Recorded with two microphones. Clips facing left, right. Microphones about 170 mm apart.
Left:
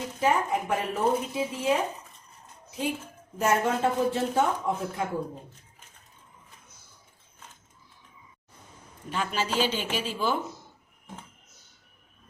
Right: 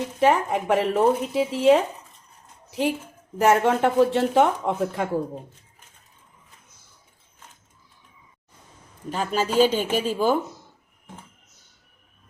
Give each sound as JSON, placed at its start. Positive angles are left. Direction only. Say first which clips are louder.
{"t": 0.2, "sound": "a woman's voice", "louder": "right 5 dB", "side_deg": -80}
{"t": 9.0, "sound": "a man's voice", "louder": "right 5 dB", "side_deg": -40}